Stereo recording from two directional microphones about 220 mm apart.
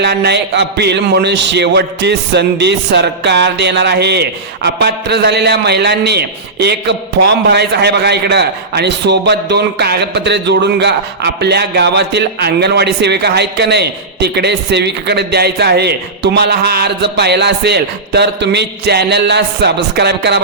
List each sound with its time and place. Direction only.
0.0 s a man's voice: 50° right (ahead or behind)